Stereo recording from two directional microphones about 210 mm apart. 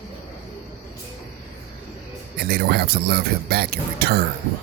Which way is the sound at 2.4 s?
50° right (ahead or behind).